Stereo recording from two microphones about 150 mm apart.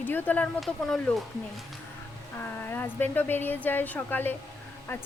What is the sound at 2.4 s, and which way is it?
A woman's voice, 15° left (ahead or behind).